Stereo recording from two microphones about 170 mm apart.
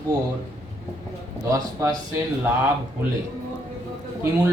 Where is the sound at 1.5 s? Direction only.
20° right (ahead or behind).